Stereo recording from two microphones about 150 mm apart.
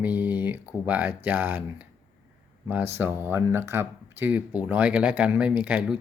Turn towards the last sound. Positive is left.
turn(degrees=-10)  # may be behind; listen again after turning